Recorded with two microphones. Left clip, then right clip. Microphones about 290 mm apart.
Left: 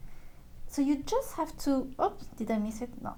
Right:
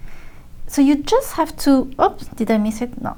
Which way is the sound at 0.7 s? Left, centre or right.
Right.